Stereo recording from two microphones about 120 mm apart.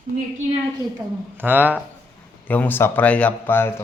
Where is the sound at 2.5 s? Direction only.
15° left (ahead or behind).